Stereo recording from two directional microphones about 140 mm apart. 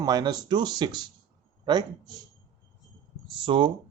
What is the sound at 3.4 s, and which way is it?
Speech, 35° right (ahead or behind).